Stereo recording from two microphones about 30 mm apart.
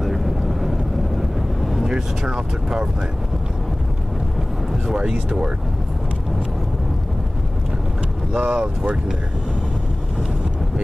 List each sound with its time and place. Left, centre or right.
0.0 s vehicle: centre
1.8 s speech: centre
4.9 s speech: right
8.4 s speech: right